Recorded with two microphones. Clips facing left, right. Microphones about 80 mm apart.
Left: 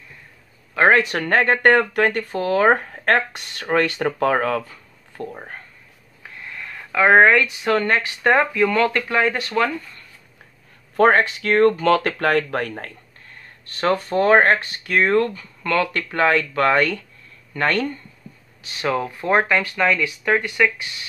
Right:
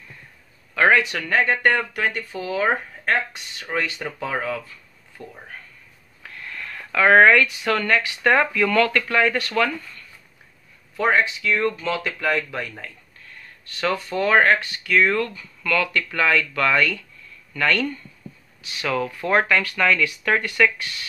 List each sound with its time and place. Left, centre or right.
0.7 s speech: left
5.3 s speech: left
6.2 s speech: centre
11.0 s speech: left
13.2 s speech: left; by 20.9 s centre